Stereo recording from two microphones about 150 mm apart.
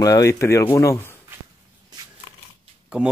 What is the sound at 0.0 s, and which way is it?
Speech, 20° left (ahead or behind).